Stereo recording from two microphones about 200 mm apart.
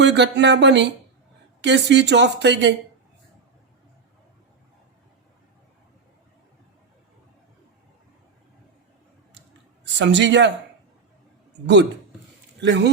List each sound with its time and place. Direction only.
0.0 s speech: 60° right (ahead or behind)
9.8 s a man's voice: 60° right (ahead or behind)
11.6 s speech: 60° right (ahead or behind)